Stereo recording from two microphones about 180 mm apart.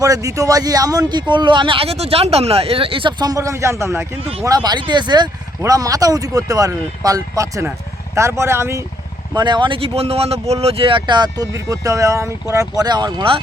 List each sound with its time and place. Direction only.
0.0 s speech: 20° right (ahead or behind)
9.3 s speech: 25° right (ahead or behind)